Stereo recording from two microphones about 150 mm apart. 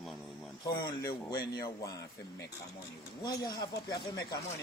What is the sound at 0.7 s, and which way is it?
Speech, 25° left (ahead or behind).